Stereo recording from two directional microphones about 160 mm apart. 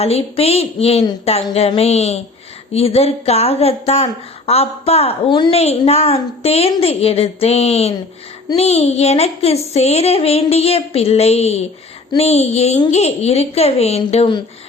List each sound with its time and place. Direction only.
0.0 s a woman's voice: 40° left (ahead or behind)